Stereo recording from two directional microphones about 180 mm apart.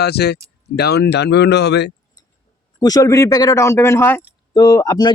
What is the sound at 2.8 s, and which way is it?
Speech, 20° left (ahead or behind).